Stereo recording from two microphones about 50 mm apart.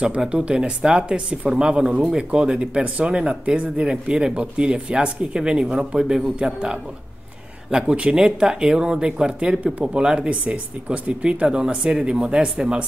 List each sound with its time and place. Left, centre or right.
0.0 s speech: centre